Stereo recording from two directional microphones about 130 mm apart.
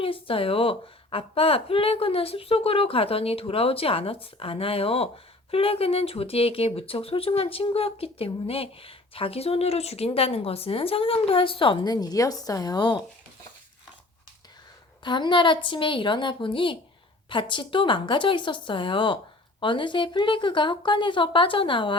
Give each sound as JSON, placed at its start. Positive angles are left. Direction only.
{"t": 0.0, "sound": "a woman's voice", "side_deg": 45}
{"t": 15.0, "sound": "speech", "side_deg": 35}